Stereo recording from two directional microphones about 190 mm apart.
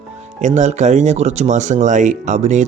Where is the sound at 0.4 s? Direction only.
40° right (ahead or behind).